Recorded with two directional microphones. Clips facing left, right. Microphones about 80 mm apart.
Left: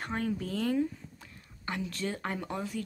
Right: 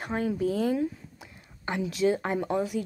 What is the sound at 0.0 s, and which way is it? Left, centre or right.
A woman's voice, centre.